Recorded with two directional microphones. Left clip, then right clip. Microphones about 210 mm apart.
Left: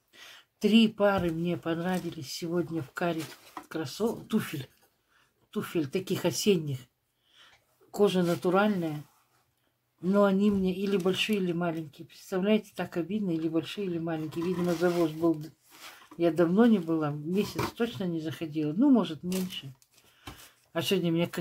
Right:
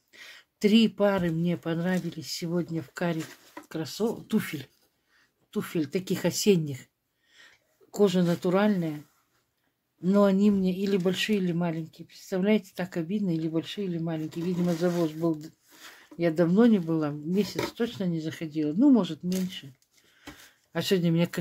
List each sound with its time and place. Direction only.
0.1 s speech: 40° right (ahead or behind)
10.0 s speech: 35° right (ahead or behind)
20.7 s speech: 40° right (ahead or behind)